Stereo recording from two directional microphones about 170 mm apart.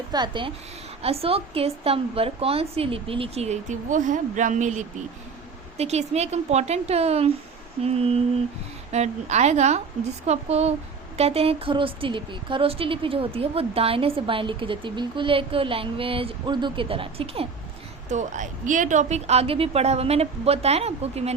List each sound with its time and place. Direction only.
0.1 s a woman's voice: 25° right (ahead or behind)
18.1 s speech: 45° right (ahead or behind)